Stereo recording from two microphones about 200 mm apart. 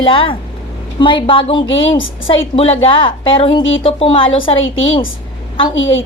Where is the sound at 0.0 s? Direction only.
25° left (ahead or behind).